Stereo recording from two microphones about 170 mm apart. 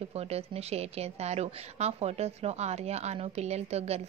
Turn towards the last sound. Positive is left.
turn(degrees=-40)  # may be behind; listen again after turning